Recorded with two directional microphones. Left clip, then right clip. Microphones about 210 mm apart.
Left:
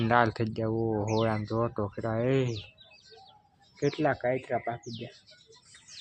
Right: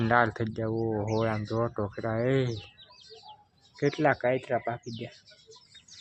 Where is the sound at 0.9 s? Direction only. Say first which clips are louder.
Left 1 dB; 15° left (ahead or behind).